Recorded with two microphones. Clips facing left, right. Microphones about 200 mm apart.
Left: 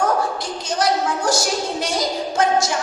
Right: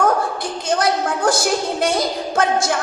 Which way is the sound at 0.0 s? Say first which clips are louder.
Right 2 dB; 55° right (ahead or behind).